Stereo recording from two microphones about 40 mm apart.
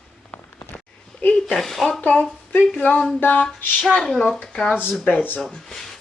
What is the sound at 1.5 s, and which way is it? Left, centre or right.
Speech, centre.